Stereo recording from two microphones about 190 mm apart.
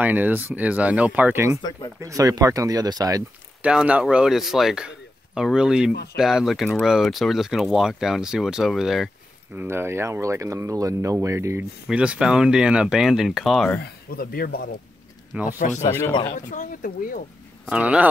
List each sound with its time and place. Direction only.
0.0 s speech: 10° right (ahead or behind)
3.6 s speech: 5° right (ahead or behind)
9.6 s speech: 10° right (ahead or behind)
13.8 s speech: 55° left (ahead or behind)
15.3 s speech: 5° right (ahead or behind)
16.3 s speech: 40° left (ahead or behind)
17.6 s speech: 5° right (ahead or behind)